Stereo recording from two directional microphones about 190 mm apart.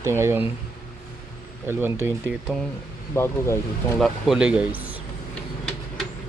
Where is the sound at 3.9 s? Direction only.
Centre (ahead or behind).